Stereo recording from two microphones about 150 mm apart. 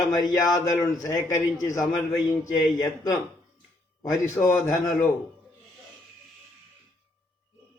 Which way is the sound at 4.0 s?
20° left (ahead or behind).